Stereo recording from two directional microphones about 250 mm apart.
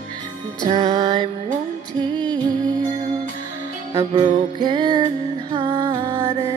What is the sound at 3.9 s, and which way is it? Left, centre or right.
Music, centre.